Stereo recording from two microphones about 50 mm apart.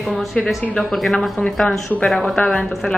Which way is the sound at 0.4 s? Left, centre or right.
Centre.